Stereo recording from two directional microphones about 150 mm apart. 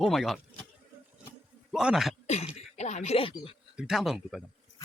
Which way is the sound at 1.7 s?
5° right (ahead or behind).